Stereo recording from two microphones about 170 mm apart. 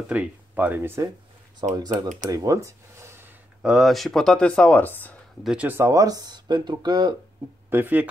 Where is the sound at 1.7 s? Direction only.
25° right (ahead or behind); by 5.1 s 10° left (ahead or behind).